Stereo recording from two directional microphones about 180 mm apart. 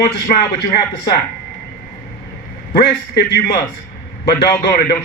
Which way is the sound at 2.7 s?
65° left (ahead or behind).